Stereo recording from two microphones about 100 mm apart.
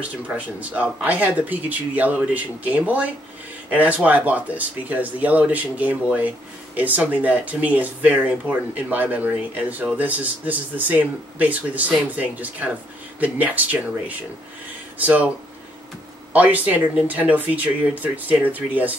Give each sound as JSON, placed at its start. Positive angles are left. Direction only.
{"t": 0.3, "sound": "speech", "side_deg": -15}
{"t": 16.3, "sound": "speech", "side_deg": -15}